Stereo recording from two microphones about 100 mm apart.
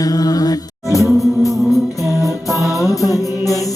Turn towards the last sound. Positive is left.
turn(degrees=35)  # may be behind; listen again after turning